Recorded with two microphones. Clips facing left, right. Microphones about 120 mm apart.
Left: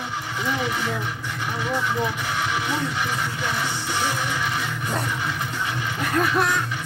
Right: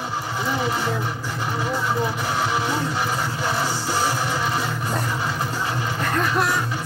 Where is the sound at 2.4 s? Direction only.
35° right (ahead or behind).